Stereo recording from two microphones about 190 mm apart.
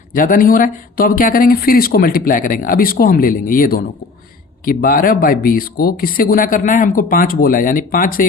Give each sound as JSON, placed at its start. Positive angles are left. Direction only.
{"t": 0.1, "sound": "speech", "side_deg": 45}